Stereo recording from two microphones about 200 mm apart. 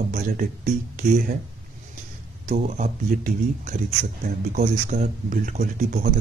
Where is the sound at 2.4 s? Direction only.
40° right (ahead or behind).